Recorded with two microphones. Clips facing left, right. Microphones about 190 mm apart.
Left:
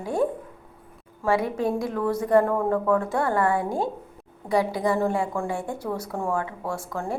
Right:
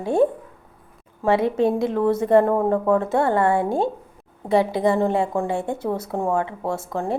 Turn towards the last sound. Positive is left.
turn(degrees=-25)  # may be behind; listen again after turning